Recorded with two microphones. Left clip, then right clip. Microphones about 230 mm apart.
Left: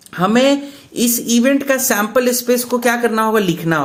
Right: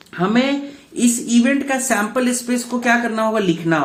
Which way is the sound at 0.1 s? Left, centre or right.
Left.